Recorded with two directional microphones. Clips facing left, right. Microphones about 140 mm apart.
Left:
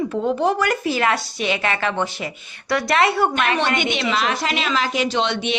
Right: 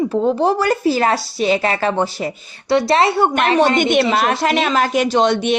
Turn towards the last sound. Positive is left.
turn(degrees=-45)  # may be behind; listen again after turning